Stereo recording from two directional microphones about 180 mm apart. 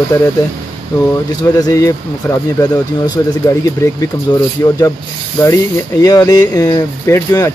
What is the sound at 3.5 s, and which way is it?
Speech, 20° left (ahead or behind).